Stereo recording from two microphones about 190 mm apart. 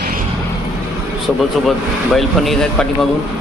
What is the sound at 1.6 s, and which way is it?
Speech, centre (ahead or behind).